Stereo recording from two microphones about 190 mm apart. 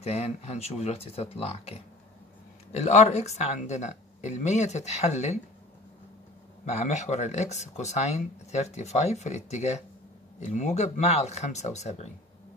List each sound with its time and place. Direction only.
0.0 s speech: 35° left (ahead or behind)
6.6 s speech: 35° left (ahead or behind)